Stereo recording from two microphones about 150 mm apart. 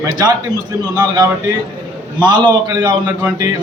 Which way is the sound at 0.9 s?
25° right (ahead or behind).